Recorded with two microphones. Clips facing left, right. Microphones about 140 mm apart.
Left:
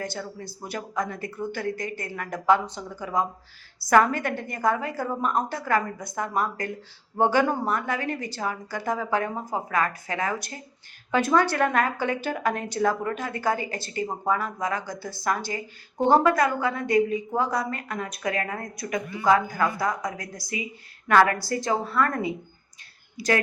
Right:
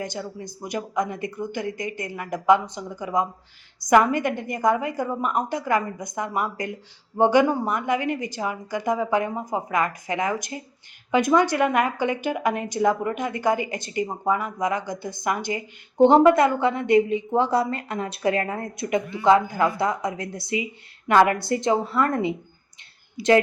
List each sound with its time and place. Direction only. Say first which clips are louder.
0.0 s a woman's voice: right 2 dB; 15° right (ahead or behind)